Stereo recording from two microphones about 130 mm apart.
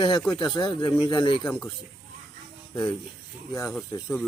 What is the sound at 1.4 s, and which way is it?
Speech, 10° left (ahead or behind).